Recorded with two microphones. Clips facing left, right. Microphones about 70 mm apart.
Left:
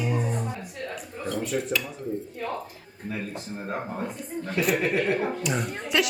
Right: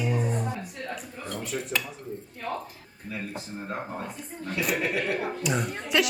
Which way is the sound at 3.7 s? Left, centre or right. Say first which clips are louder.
Left 3 dB; centre.